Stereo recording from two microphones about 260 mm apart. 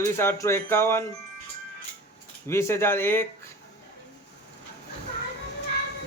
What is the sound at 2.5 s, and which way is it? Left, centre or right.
Speech, centre.